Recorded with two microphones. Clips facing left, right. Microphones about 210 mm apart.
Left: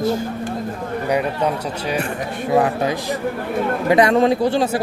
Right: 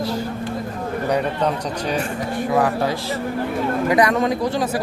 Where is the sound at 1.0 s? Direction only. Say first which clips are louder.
Left 1 dB; 10° left (ahead or behind).